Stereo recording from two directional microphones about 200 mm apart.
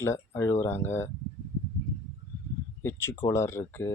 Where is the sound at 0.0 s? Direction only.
15° left (ahead or behind).